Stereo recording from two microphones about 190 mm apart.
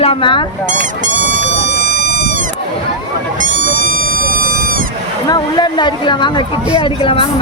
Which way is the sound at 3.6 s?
45° right (ahead or behind).